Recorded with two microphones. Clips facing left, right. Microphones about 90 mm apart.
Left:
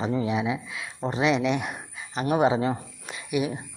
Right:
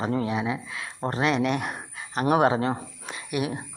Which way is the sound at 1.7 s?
45° right (ahead or behind).